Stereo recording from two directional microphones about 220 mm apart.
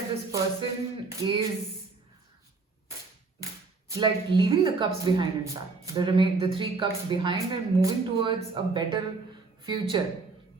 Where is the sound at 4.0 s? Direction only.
20° right (ahead or behind).